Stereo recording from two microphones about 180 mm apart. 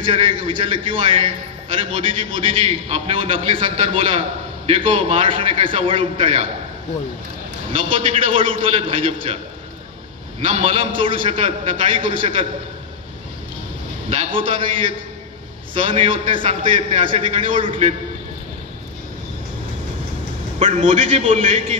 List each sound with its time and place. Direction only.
0.0 s a man's voice: 25° right (ahead or behind)
7.7 s a man's voice: 30° right (ahead or behind)
10.4 s a man's voice: 30° right (ahead or behind)
14.0 s a man's voice: 30° right (ahead or behind)
15.7 s a man's voice: 30° right (ahead or behind)
20.5 s a man's voice: 40° right (ahead or behind)